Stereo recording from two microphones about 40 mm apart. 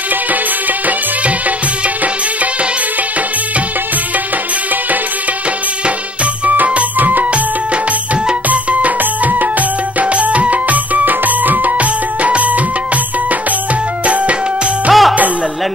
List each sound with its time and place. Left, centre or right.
7.0 s music: right
8.5 s music: right
14.9 s music: centre